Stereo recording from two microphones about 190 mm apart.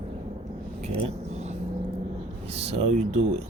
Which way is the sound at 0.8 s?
35° right (ahead or behind).